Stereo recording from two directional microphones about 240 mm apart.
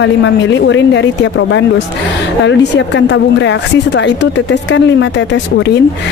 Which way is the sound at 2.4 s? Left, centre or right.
Left.